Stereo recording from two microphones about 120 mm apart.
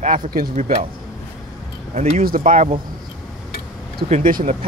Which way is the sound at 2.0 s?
70° right (ahead or behind).